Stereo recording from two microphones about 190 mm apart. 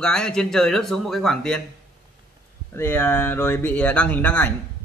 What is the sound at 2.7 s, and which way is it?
A man's voice, 10° left (ahead or behind).